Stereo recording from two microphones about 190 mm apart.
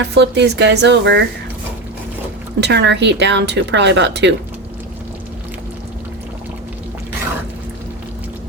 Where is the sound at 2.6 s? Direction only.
65° right (ahead or behind).